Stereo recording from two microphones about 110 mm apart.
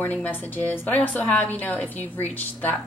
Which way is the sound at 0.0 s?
15° left (ahead or behind).